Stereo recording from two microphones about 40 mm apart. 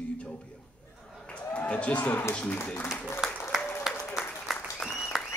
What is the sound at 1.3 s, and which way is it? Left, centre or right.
Speech, left.